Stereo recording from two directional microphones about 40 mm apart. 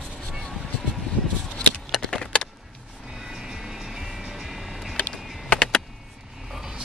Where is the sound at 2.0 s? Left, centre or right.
Left.